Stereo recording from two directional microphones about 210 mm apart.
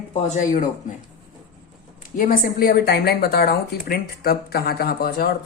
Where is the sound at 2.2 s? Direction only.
40° left (ahead or behind).